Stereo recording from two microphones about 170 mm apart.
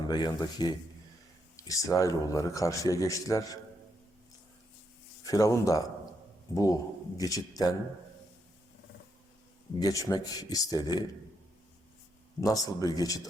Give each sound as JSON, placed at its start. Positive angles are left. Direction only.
{"t": 0.1, "sound": "a man's voice", "side_deg": 25}
{"t": 5.2, "sound": "a man's voice", "side_deg": 20}
{"t": 9.8, "sound": "a man's voice", "side_deg": 20}
{"t": 12.4, "sound": "a man's voice", "side_deg": 20}